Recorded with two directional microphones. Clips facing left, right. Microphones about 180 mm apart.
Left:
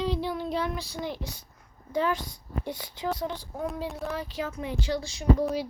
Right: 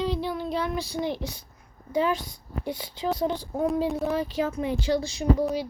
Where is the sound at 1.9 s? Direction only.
15° right (ahead or behind).